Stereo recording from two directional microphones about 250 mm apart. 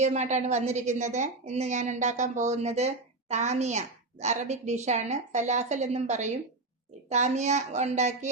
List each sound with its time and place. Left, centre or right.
0.0 s a woman's voice: right